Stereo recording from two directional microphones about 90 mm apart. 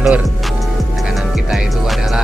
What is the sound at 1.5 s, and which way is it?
Music, 5° right (ahead or behind).